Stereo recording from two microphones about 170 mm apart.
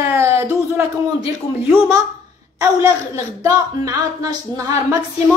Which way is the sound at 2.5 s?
20° right (ahead or behind).